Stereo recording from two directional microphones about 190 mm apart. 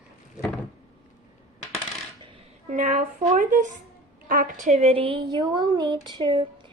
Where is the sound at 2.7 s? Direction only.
40° right (ahead or behind).